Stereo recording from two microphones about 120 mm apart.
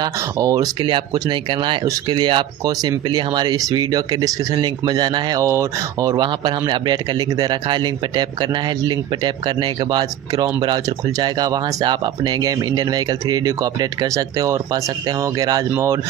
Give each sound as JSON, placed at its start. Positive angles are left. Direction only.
{"t": 0.0, "sound": "speech", "side_deg": -30}